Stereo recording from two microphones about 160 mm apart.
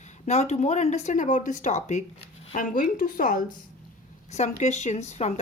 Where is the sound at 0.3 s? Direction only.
40° left (ahead or behind).